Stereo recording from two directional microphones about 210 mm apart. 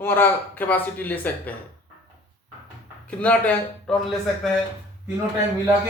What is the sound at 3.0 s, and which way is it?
Speech, 5° left (ahead or behind).